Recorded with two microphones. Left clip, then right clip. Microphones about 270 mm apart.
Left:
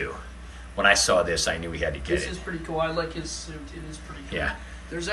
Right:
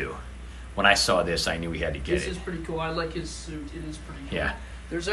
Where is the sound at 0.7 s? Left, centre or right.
Centre.